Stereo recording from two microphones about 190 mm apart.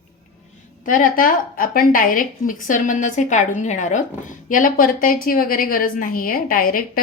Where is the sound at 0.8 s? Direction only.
45° left (ahead or behind).